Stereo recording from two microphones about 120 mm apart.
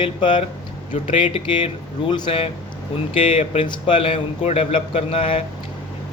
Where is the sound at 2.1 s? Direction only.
45° left (ahead or behind).